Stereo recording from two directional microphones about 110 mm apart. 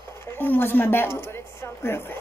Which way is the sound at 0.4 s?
20° left (ahead or behind).